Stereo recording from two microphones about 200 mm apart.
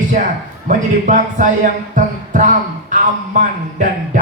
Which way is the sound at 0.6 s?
40° right (ahead or behind).